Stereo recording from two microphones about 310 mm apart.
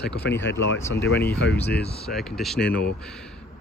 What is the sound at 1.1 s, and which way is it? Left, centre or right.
Speech, left.